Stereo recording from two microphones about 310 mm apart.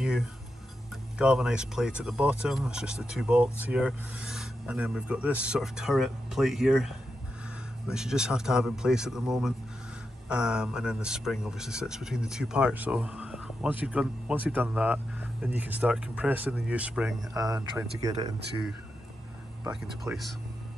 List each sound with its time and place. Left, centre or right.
1.1 s speech: centre